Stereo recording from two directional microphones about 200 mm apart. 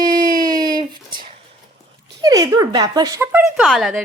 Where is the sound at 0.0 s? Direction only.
20° right (ahead or behind).